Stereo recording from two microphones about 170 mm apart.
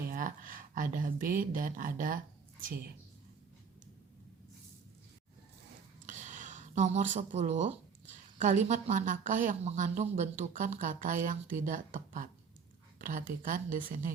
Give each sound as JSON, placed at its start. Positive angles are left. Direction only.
{"t": 0.1, "sound": "speech", "side_deg": -50}
{"t": 6.1, "sound": "a sound", "side_deg": -45}
{"t": 8.4, "sound": "a woman's voice", "side_deg": -45}